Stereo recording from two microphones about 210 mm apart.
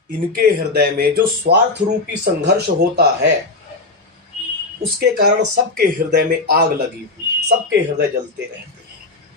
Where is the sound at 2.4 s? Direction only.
50° right (ahead or behind).